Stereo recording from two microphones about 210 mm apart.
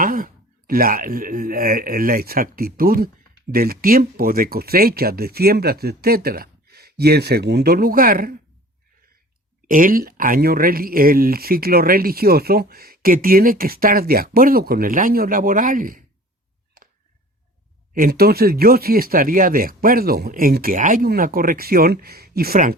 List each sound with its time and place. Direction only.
0.0 s a sound: 40° right (ahead or behind)
0.7 s speech: 45° right (ahead or behind)
9.6 s speech: 40° right (ahead or behind)
17.9 s speech: 45° right (ahead or behind)